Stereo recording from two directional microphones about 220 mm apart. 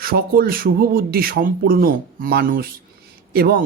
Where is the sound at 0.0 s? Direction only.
40° right (ahead or behind).